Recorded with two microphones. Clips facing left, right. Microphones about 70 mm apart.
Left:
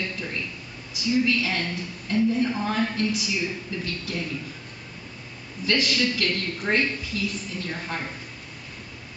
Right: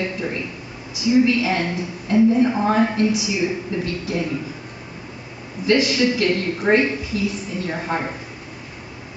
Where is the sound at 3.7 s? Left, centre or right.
Right.